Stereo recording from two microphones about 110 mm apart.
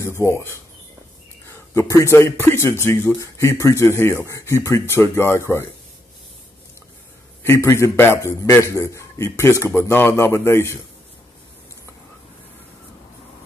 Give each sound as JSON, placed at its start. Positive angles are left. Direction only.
{"t": 0.0, "sound": "speech", "side_deg": 25}
{"t": 7.4, "sound": "speech", "side_deg": 25}